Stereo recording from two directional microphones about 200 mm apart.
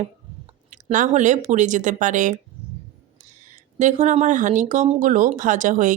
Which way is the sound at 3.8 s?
35° right (ahead or behind).